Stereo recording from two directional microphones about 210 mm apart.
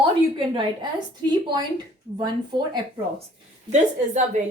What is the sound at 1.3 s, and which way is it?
Speech, 20° right (ahead or behind).